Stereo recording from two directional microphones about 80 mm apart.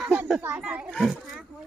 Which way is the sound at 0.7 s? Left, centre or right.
Right.